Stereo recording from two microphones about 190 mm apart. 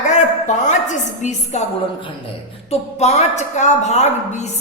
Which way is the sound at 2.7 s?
35° left (ahead or behind).